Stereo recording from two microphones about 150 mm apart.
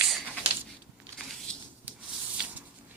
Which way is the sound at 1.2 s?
Centre (ahead or behind).